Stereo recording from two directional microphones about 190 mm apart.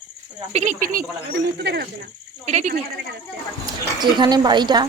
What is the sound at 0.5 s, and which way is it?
Speech, 40° right (ahead or behind).